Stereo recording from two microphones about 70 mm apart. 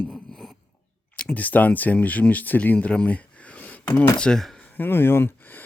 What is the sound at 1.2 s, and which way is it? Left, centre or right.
Speech, left.